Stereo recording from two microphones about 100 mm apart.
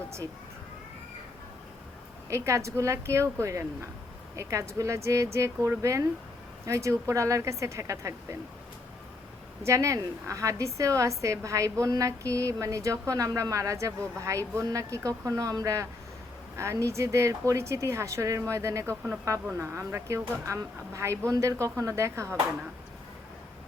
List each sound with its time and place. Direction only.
2.3 s a woman's voice: 30° right (ahead or behind)
9.6 s a woman's voice: 30° right (ahead or behind)